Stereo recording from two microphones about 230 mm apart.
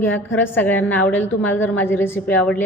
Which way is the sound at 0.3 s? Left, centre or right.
Centre.